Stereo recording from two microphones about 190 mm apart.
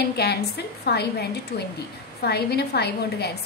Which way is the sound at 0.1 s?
55° left (ahead or behind).